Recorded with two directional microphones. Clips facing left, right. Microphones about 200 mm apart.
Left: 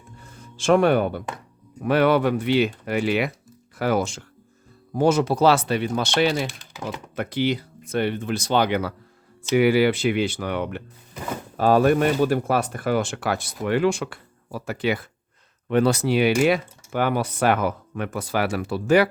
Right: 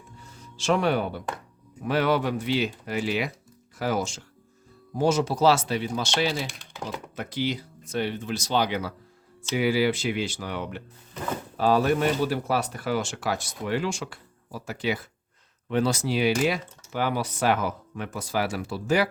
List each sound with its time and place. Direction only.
0.2 s music: 55° left (ahead or behind)
1.8 s speech: 60° left (ahead or behind)
6.5 s speech: centre (ahead or behind)
7.2 s speech: 60° left (ahead or behind)